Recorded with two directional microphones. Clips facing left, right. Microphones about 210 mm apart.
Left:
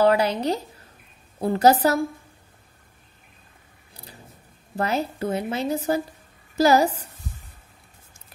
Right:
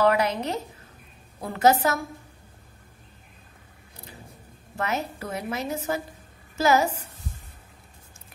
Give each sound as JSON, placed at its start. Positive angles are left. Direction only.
{"t": 0.0, "sound": "a woman's voice", "side_deg": 30}
{"t": 4.7, "sound": "a woman's voice", "side_deg": 35}